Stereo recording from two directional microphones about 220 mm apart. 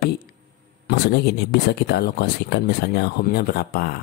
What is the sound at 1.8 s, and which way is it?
Speech, 45° left (ahead or behind).